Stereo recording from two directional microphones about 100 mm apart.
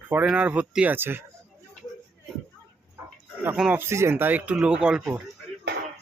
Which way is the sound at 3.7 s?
25° right (ahead or behind).